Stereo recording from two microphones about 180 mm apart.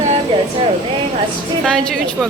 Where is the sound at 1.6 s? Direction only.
5° left (ahead or behind).